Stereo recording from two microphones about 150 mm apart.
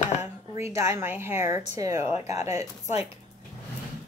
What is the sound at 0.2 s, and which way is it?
Speech, 15° right (ahead or behind).